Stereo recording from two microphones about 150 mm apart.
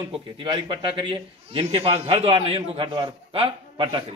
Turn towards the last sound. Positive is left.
turn(degrees=-35)  # may be behind; listen again after turning